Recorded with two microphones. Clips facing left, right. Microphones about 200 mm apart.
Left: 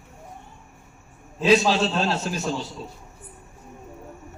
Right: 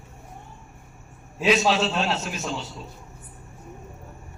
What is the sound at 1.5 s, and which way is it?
A man's voice, 30° left (ahead or behind).